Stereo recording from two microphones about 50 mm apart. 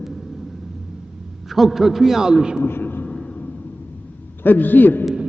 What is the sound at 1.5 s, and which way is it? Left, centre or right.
A man's voice, centre.